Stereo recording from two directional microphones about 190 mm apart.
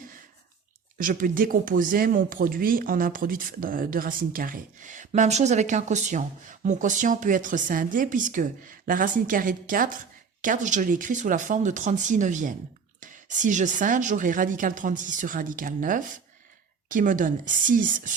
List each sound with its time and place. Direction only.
0.9 s speech: 45° right (ahead or behind)